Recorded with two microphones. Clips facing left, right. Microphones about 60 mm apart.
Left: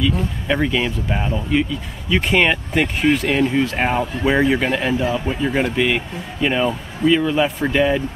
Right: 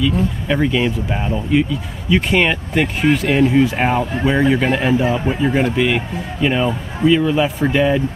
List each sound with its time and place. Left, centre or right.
0.0 s speech: centre
5.5 s speech: centre